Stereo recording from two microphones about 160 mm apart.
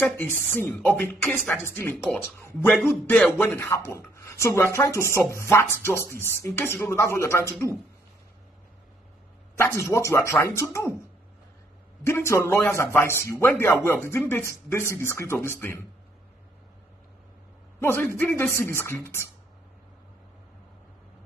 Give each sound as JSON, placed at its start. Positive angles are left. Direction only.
{"t": 0.2, "sound": "speech", "side_deg": 10}
{"t": 9.6, "sound": "speech", "side_deg": 20}
{"t": 12.0, "sound": "speech", "side_deg": 15}
{"t": 17.7, "sound": "speech", "side_deg": 15}